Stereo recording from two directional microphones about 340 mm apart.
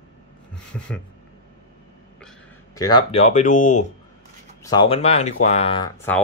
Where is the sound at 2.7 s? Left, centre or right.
Centre.